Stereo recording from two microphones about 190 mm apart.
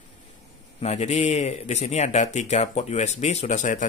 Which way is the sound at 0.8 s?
35° left (ahead or behind).